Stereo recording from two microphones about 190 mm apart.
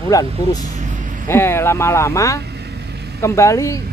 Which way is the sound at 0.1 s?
20° left (ahead or behind).